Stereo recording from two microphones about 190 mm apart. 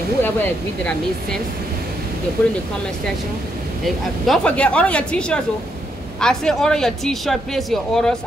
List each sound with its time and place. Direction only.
2.4 s speech: 5° left (ahead or behind)
3.8 s speech: 5° left (ahead or behind)